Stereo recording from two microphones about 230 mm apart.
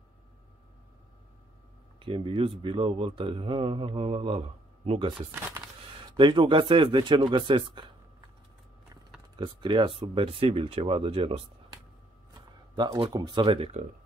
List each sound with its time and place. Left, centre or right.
2.0 s speech: right
6.1 s speech: right
9.4 s speech: centre